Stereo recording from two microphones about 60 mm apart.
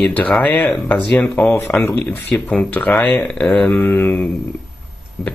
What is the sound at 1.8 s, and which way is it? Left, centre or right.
Speech, left.